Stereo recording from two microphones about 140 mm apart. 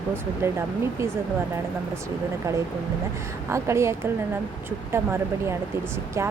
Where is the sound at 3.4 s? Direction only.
20° right (ahead or behind).